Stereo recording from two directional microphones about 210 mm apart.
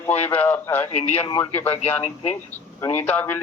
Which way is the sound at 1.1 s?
25° left (ahead or behind).